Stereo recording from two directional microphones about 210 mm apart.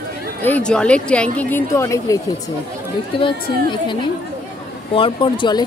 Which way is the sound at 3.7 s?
20° left (ahead or behind).